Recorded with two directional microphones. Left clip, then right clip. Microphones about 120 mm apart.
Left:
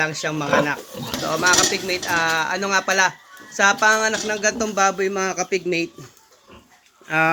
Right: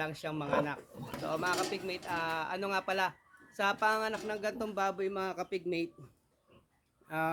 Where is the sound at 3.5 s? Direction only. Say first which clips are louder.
Left 14 dB; 25° right (ahead or behind).